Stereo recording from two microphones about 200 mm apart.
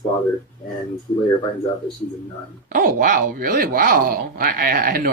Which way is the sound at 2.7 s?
45° right (ahead or behind).